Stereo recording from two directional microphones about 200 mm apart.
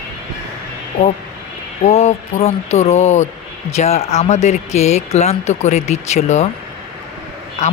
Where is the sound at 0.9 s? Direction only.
45° left (ahead or behind).